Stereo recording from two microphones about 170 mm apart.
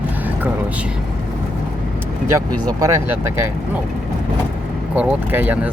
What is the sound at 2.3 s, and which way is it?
Speech, 20° right (ahead or behind).